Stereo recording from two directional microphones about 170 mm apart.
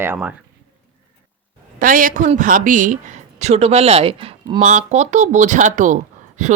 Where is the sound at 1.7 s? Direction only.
55° right (ahead or behind); by 4.6 s 30° right (ahead or behind).